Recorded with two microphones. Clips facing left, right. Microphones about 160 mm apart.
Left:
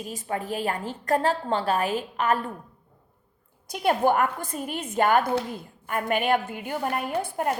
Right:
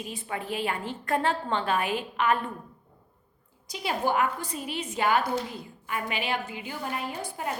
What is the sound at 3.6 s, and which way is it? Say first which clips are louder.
A woman's voice: left 6 dB; 55° left (ahead or behind).